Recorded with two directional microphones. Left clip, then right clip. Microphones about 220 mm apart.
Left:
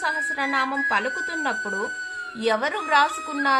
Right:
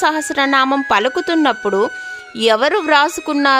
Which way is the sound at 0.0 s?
55° right (ahead or behind).